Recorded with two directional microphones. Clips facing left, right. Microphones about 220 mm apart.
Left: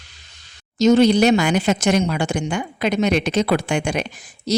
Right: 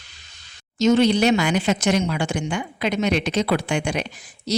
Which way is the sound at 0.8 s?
40° left (ahead or behind).